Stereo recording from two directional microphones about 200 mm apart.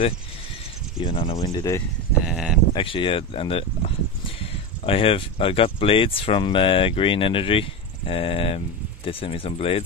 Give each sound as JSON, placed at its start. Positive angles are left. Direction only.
{"t": 1.0, "sound": "speech", "side_deg": 30}
{"t": 2.2, "sound": "speech", "side_deg": 0}
{"t": 2.7, "sound": "speech", "side_deg": 25}